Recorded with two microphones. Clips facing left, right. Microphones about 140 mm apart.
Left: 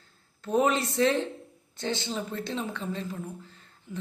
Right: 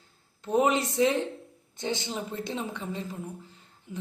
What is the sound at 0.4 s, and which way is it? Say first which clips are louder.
Speech: even; 15° right (ahead or behind).